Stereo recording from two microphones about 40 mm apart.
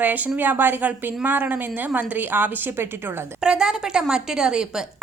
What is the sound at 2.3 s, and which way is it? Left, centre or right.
Speech, right.